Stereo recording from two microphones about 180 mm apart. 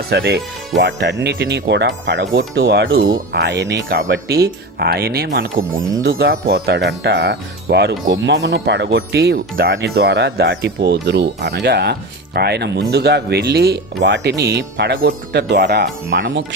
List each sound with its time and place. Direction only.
0.1 s speech: 65° right (ahead or behind); by 16.6 s 90° right